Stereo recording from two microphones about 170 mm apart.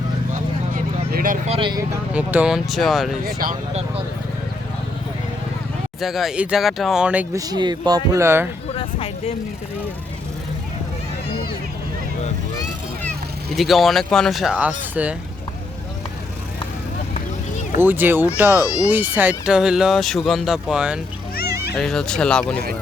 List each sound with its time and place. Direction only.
1.1 s a sound: 55° right (ahead or behind)
1.5 s speech: 30° right (ahead or behind)
2.1 s speech: 5° right (ahead or behind)
3.2 s speech: 60° right (ahead or behind)
6.0 s speech: centre (ahead or behind)
7.3 s speech: 25° right (ahead or behind)
8.7 s a sound: 35° left (ahead or behind)
13.6 s speech: centre (ahead or behind)
17.7 s speech: 10° right (ahead or behind)
18.6 s speech: 20° left (ahead or behind)
18.9 s speech: 10° right (ahead or behind)